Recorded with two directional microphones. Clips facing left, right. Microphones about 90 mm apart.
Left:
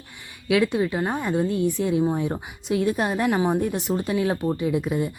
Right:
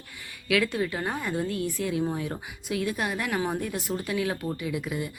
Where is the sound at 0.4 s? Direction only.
25° left (ahead or behind).